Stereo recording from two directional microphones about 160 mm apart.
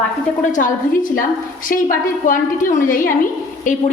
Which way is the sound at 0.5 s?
55° left (ahead or behind).